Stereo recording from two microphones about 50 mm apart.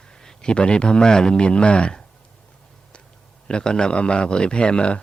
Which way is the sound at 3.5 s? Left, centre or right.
Centre.